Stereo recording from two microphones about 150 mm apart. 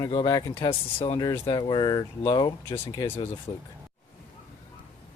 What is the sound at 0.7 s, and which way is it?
Speech, 35° left (ahead or behind).